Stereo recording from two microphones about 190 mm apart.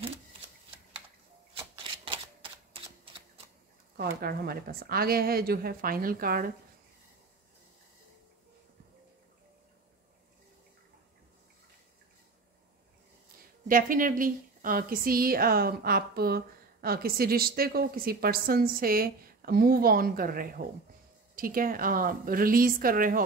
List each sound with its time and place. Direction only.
1.8 s shuffling cards: 30° right (ahead or behind)
3.9 s a woman's voice: 55° right (ahead or behind)
13.7 s a woman's voice: 45° right (ahead or behind)